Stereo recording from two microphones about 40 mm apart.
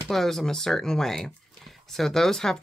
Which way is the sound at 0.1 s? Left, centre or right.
Centre.